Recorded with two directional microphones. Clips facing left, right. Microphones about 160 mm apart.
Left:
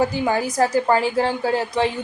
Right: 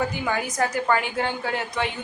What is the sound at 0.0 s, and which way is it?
A woman's voice, 35° left (ahead or behind).